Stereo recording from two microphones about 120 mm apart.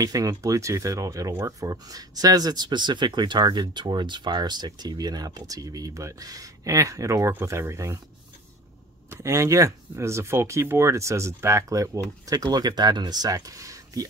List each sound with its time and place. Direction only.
0.0 s speech: 30° right (ahead or behind)
9.1 s speech: 25° right (ahead or behind)